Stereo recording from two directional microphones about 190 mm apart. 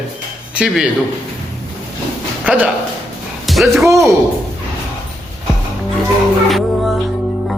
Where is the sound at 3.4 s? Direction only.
Centre (ahead or behind).